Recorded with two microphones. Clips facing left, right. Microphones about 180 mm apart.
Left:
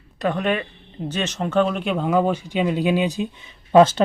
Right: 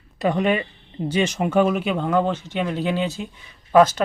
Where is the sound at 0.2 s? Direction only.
10° right (ahead or behind).